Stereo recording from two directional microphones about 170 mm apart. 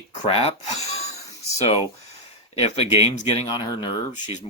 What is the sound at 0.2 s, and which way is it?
Speech, 35° left (ahead or behind).